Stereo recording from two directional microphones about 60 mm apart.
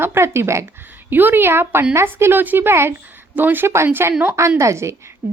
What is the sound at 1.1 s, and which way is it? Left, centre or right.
A woman's voice, right.